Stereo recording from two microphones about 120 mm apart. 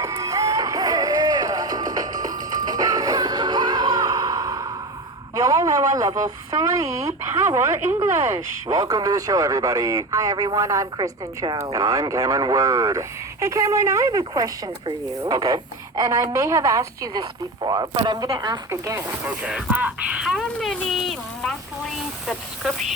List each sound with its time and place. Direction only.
0.0 s music: 30° right (ahead or behind)
5.3 s a man's voice: 30° right (ahead or behind)
8.7 s a man's voice: 30° right (ahead or behind)
18.7 s a man's voice: 20° right (ahead or behind)
19.4 s a sound: 10° right (ahead or behind)